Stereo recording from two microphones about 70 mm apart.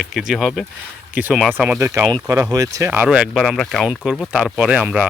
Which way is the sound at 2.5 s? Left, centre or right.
Right.